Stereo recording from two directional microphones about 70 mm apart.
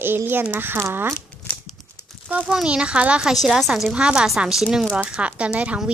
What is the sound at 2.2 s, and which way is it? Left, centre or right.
A child's voice, right.